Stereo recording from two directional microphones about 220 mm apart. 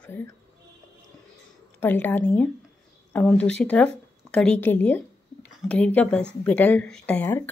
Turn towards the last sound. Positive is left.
turn(degrees=10)  # may be behind; listen again after turning